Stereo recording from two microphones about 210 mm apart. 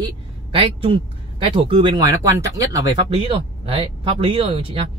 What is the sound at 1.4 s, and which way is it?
Speech, 25° right (ahead or behind).